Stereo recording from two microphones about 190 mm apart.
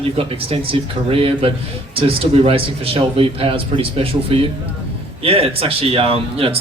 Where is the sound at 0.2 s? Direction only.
30° right (ahead or behind).